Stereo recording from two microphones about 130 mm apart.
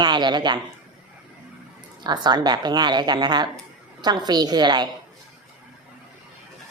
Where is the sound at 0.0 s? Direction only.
35° right (ahead or behind).